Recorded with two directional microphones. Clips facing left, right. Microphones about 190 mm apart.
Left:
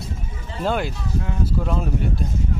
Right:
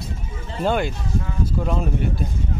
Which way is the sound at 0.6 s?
Centre (ahead or behind).